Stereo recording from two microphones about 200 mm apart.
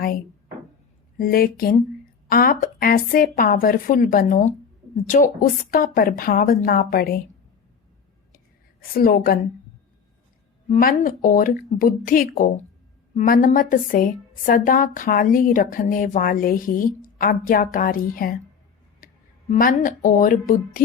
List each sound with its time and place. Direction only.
1.2 s a woman's voice: 45° left (ahead or behind)
8.8 s a woman's voice: 45° left (ahead or behind)
10.7 s a woman's voice: 45° left (ahead or behind)